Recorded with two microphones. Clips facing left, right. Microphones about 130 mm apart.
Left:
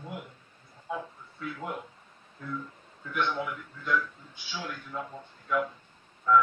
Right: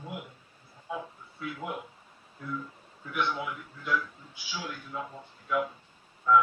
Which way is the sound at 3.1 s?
10° right (ahead or behind).